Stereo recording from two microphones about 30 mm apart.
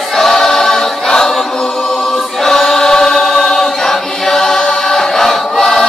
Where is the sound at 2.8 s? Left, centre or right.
Centre.